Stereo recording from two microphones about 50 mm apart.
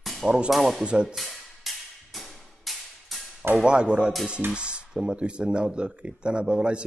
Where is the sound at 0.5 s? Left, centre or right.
Centre.